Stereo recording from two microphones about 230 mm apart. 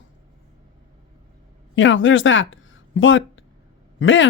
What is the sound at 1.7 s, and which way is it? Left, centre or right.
Speech, left.